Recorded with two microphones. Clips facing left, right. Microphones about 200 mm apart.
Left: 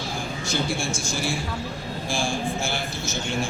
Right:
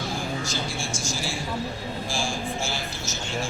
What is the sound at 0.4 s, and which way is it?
A man's voice, 55° left (ahead or behind).